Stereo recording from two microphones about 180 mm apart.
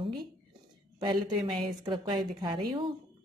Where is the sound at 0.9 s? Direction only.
25° right (ahead or behind).